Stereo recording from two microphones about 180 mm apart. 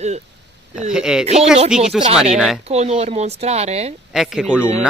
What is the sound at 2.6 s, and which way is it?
Speech, 35° right (ahead or behind).